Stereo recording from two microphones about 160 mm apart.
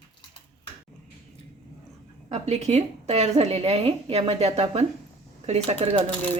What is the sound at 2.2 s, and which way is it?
Speech, 45° right (ahead or behind).